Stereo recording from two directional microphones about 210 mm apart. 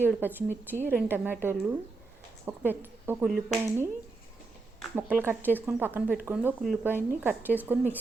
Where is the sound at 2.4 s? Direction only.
10° right (ahead or behind).